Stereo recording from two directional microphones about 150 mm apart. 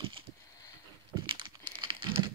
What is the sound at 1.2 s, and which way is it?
Crumpling, 30° right (ahead or behind).